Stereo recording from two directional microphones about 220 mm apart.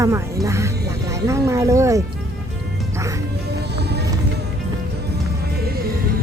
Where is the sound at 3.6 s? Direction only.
50° right (ahead or behind).